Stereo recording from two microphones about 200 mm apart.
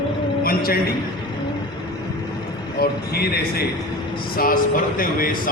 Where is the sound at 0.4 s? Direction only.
45° left (ahead or behind).